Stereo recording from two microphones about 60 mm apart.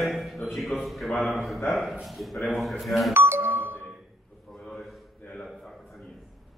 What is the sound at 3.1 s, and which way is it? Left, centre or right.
Doorbell, right.